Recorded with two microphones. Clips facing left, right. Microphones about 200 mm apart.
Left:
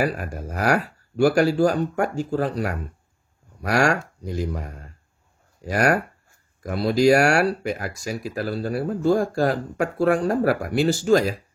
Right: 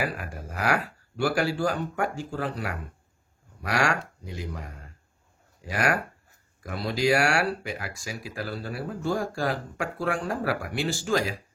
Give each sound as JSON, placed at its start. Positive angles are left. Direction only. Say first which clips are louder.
{"t": 0.0, "sound": "speech", "louder": "left 7 dB", "side_deg": 45}